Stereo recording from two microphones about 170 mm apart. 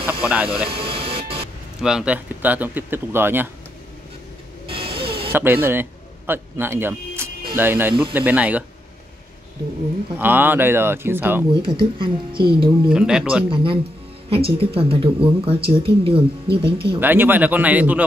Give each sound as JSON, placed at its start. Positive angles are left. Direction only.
{"t": 0.2, "sound": "snake", "side_deg": -10}
{"t": 0.7, "sound": "vehicle", "side_deg": -30}
{"t": 1.8, "sound": "speech", "side_deg": -5}
{"t": 4.6, "sound": "printer", "side_deg": -30}
{"t": 5.3, "sound": "a man's voice", "side_deg": -15}
{"t": 10.1, "sound": "speech", "side_deg": -10}
{"t": 11.5, "sound": "speech", "side_deg": -30}
{"t": 12.9, "sound": "speech", "side_deg": -5}
{"t": 13.5, "sound": "a woman's voice", "side_deg": -30}
{"t": 17.0, "sound": "speech", "side_deg": -10}